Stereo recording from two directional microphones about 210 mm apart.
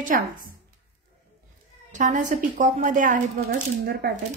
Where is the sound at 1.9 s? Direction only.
35° right (ahead or behind).